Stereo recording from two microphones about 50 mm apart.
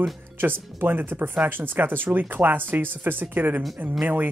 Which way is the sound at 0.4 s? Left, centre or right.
Right.